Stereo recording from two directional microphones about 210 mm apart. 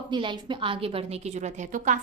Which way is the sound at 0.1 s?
20° right (ahead or behind).